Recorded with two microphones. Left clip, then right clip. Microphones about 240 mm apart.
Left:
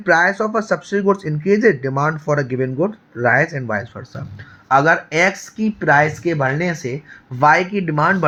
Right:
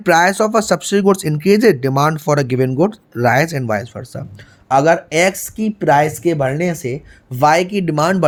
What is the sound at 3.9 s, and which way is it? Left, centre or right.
Speech, right.